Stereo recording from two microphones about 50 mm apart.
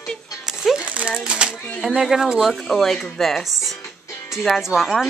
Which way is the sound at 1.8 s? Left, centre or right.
Centre.